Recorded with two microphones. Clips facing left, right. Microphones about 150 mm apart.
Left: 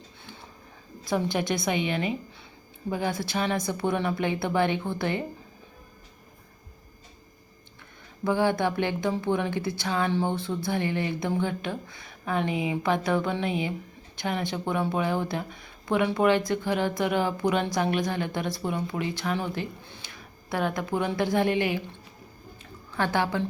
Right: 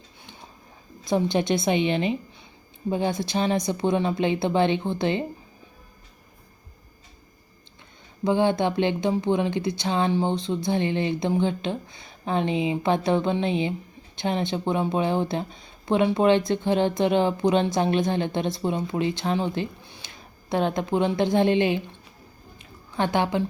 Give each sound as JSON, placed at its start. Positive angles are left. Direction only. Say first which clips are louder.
{"t": 1.0, "sound": "speech", "louder": "right 4 dB", "side_deg": -25}
{"t": 8.2, "sound": "speech", "louder": "right 3 dB", "side_deg": -20}
{"t": 22.5, "sound": "a sound", "louder": "right 3 dB", "side_deg": -15}